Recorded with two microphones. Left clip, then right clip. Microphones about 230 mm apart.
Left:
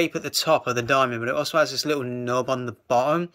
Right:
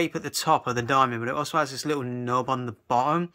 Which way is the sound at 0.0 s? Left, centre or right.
Centre.